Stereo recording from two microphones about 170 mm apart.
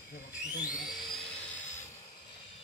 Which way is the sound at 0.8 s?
Centre (ahead or behind).